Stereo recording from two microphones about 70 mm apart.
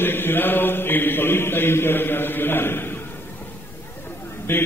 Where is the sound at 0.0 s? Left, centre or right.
Left.